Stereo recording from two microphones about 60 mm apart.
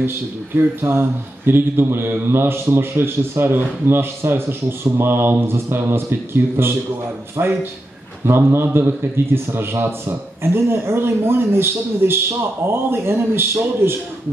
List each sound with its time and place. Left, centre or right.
0.8 s speech: right
7.4 s a man's voice: right